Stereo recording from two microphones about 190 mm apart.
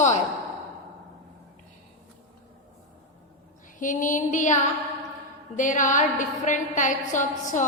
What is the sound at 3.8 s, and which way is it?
Speech, 45° left (ahead or behind).